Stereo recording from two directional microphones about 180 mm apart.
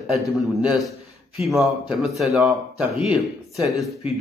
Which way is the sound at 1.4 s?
Centre (ahead or behind).